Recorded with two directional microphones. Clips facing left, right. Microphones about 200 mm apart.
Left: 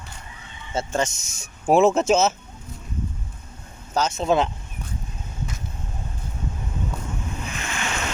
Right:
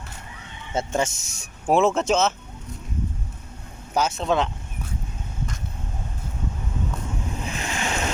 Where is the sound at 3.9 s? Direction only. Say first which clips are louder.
Even; 10° right (ahead or behind).